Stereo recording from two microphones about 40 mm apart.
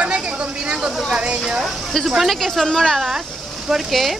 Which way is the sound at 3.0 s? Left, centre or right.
Centre.